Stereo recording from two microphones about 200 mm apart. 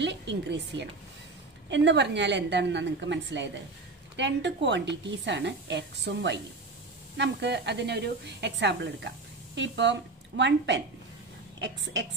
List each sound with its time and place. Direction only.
0.0 s a woman's voice: 60° right (ahead or behind)